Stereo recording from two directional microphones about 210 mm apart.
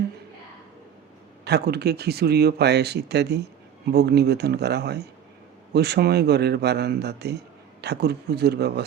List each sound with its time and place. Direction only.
1.5 s speech: 50° right (ahead or behind)